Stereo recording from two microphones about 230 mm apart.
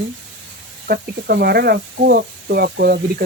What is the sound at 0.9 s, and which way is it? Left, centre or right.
Speech, right.